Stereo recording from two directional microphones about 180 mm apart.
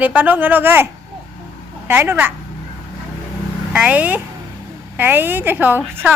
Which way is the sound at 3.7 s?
10° right (ahead or behind).